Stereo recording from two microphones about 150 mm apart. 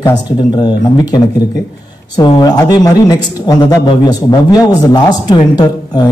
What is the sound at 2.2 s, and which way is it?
A man's voice, 30° left (ahead or behind).